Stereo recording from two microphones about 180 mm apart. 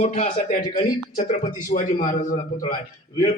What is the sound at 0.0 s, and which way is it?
A man's voice, 40° left (ahead or behind).